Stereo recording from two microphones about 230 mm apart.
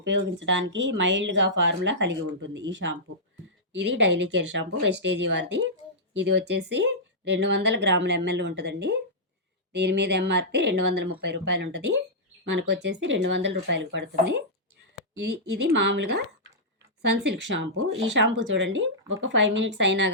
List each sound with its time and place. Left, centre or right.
0.0 s speech: right